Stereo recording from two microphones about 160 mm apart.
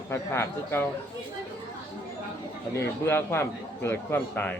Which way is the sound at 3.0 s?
15° left (ahead or behind).